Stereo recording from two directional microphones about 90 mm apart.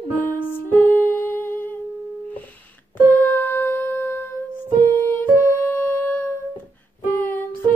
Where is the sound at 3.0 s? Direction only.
25° left (ahead or behind).